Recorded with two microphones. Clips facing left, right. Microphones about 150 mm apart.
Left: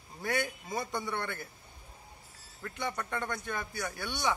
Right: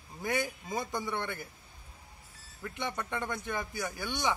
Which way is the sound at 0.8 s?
5° right (ahead or behind).